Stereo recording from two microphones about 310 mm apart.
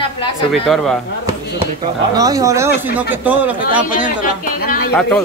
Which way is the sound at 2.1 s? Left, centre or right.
Centre.